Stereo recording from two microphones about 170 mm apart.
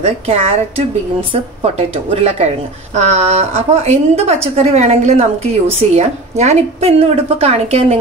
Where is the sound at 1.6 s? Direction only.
35° right (ahead or behind).